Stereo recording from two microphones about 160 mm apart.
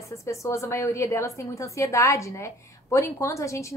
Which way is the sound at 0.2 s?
20° left (ahead or behind).